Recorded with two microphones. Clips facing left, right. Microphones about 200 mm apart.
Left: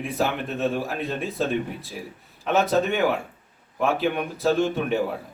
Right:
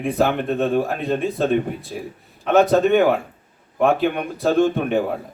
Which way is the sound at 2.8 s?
55° right (ahead or behind).